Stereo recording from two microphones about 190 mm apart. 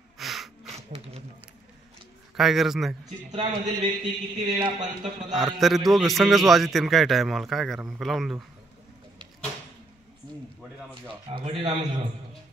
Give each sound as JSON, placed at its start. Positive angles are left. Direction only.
{"t": 0.2, "sound": "a sound", "side_deg": 0}
{"t": 2.3, "sound": "a man's voice", "side_deg": 0}
{"t": 3.3, "sound": "speech", "side_deg": -25}
{"t": 5.3, "sound": "a man's voice", "side_deg": 0}
{"t": 11.3, "sound": "speech", "side_deg": -25}